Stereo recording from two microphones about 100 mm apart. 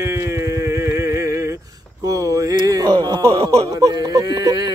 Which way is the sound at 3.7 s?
35° right (ahead or behind).